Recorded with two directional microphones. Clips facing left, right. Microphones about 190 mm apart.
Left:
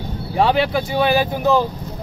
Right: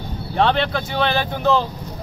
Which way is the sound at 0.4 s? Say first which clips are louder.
Left 2 dB; 5° left (ahead or behind).